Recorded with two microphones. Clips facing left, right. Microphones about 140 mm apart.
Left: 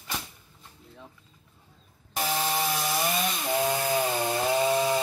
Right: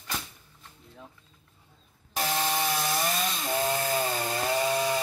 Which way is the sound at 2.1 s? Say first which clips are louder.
Even; 5° left (ahead or behind).